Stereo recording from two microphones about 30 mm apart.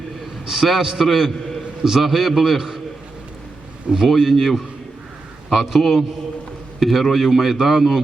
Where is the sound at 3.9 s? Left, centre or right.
Right.